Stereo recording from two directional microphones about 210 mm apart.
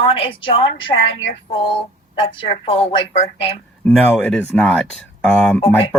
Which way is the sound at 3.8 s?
5° left (ahead or behind).